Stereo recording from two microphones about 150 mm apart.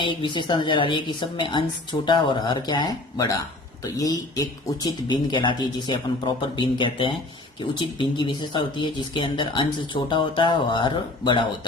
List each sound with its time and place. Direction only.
0.0 s speech: 35° left (ahead or behind)